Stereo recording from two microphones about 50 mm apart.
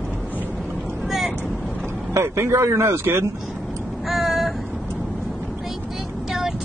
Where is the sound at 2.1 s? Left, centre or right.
Right.